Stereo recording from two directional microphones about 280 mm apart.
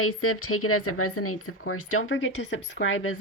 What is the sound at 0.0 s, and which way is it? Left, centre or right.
Speech, left.